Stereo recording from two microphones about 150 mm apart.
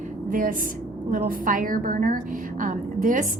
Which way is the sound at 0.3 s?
65° right (ahead or behind).